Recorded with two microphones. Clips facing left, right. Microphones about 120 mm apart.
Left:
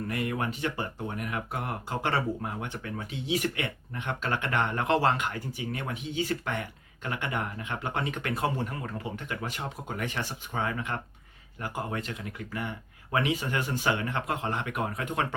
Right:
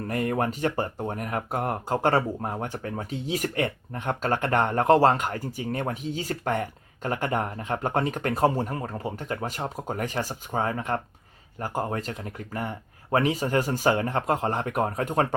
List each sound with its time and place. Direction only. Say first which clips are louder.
0.1 s speech: right 7 dB; 40° right (ahead or behind)